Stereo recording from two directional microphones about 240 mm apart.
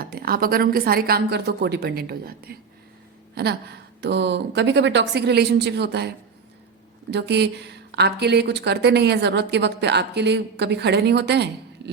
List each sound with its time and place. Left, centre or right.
0.0 s a woman's voice: right
7.1 s a woman's voice: right